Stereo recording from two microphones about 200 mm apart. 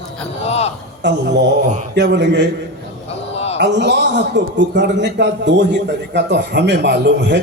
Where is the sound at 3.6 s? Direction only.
60° right (ahead or behind).